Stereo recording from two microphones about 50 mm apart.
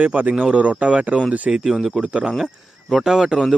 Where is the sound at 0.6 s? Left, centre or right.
Right.